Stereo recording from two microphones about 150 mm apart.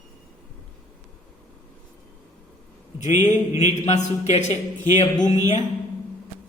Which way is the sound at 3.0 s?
50° left (ahead or behind).